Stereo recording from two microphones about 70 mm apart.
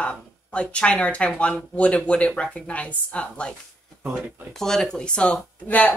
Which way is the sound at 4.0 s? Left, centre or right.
Right.